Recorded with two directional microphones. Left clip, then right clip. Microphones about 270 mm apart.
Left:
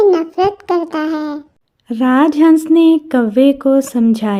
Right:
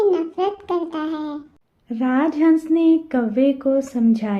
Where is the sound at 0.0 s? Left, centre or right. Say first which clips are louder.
Left 7 dB; left.